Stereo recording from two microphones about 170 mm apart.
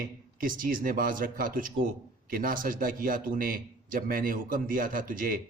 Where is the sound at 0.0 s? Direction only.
55° right (ahead or behind).